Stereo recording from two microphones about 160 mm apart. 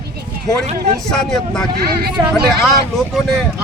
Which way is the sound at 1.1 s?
5° left (ahead or behind).